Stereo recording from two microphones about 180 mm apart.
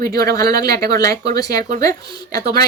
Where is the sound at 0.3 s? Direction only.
20° left (ahead or behind).